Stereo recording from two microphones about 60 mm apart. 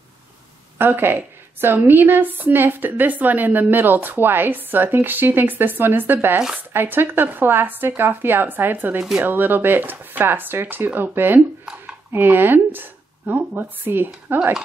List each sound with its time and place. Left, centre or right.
0.7 s a woman's voice: right
13.8 s a woman's voice: right